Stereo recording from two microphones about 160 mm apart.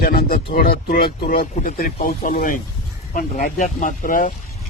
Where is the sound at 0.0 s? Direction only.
65° left (ahead or behind).